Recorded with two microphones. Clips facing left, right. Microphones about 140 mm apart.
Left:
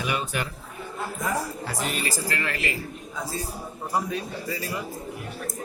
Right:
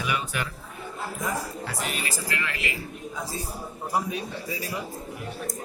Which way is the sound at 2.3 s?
40° left (ahead or behind).